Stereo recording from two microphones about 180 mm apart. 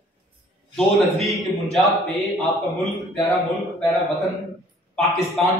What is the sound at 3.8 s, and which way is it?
Speech, centre (ahead or behind).